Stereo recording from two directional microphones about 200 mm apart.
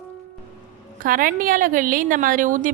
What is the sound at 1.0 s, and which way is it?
A woman's voice, 45° right (ahead or behind).